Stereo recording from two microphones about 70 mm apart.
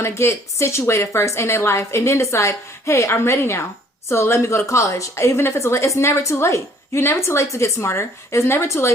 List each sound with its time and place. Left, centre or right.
0.0 s a woman's voice: left